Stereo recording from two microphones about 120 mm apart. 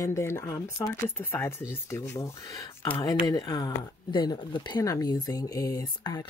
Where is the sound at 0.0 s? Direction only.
25° left (ahead or behind).